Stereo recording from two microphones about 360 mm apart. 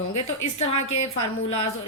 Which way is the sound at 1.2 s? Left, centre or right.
Left.